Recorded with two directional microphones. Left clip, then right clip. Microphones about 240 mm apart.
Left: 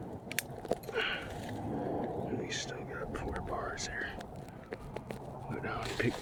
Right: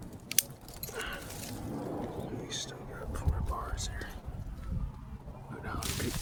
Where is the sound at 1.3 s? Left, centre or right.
Right.